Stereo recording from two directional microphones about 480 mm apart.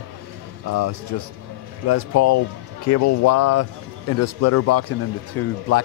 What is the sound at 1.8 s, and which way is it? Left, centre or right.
Speech, left.